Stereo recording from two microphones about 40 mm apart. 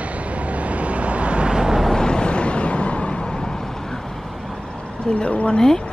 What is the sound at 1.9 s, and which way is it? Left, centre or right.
Vehicle, centre.